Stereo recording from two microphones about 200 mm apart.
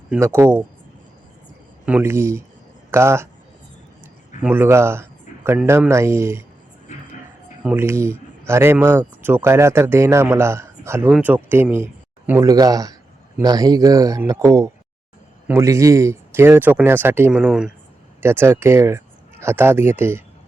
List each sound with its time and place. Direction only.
0.1 s speech: 10° right (ahead or behind)
1.9 s speech: 10° right (ahead or behind)
4.4 s speech: 10° right (ahead or behind)
6.9 s vehicle: 35° left (ahead or behind)
7.6 s speech: 10° right (ahead or behind)